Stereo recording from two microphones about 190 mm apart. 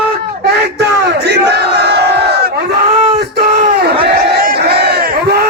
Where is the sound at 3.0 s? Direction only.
35° right (ahead or behind).